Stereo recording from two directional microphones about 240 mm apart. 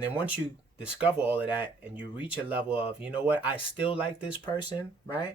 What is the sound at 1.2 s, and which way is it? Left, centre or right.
Speech, centre.